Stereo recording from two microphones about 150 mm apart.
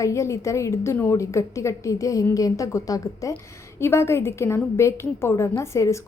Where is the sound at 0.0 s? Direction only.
20° left (ahead or behind).